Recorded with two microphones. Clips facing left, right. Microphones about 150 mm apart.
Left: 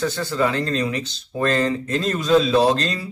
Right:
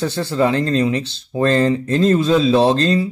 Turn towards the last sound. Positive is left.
turn(degrees=-30)  # may be behind; listen again after turning